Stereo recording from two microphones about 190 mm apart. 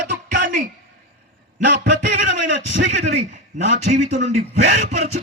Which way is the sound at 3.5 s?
40° right (ahead or behind).